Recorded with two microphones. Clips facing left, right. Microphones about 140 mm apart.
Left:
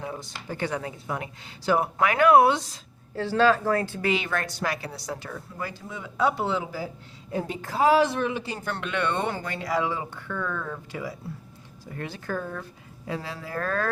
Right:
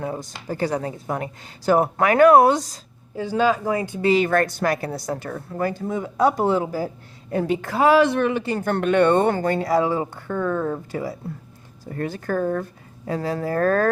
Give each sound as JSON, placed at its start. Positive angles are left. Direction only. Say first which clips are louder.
{"t": 0.0, "sound": "speech", "louder": "right 6 dB", "side_deg": -45}
{"t": 3.2, "sound": "speech", "louder": "right 1 dB", "side_deg": -10}
{"t": 4.0, "sound": "speech", "louder": "right 9 dB", "side_deg": -40}
{"t": 7.3, "sound": "speech", "louder": "right 8 dB", "side_deg": -70}